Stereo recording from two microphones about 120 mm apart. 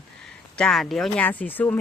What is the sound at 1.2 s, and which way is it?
Speech, 15° left (ahead or behind).